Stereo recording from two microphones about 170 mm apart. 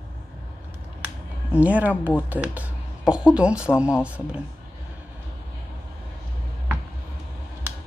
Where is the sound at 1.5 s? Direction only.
10° right (ahead or behind).